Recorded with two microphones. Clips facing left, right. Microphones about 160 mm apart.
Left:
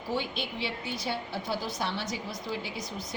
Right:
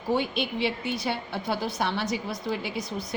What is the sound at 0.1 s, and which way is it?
A woman's voice, 60° right (ahead or behind).